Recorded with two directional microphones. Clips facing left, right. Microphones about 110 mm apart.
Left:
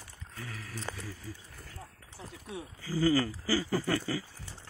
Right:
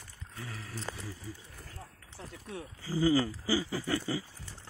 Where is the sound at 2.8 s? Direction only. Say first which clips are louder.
Even; 20° right (ahead or behind).